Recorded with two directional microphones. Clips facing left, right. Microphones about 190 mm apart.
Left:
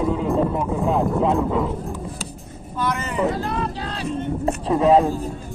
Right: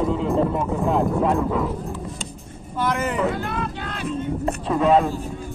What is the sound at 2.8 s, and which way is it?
Speech, 50° right (ahead or behind).